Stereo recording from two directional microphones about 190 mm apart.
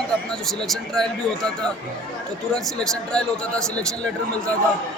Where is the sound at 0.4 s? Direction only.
Centre (ahead or behind).